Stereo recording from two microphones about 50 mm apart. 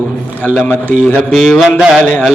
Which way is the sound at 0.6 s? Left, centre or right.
Left.